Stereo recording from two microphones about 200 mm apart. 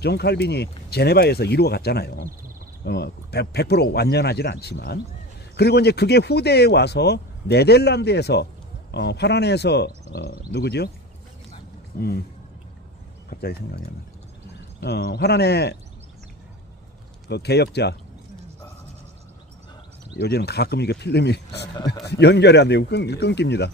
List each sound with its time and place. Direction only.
0.0 s speech: 55° left (ahead or behind)
11.9 s speech: 50° left (ahead or behind)
13.3 s speech: 50° left (ahead or behind)
14.8 s speech: 55° left (ahead or behind)
17.3 s speech: 55° left (ahead or behind)
20.2 s speech: 55° left (ahead or behind)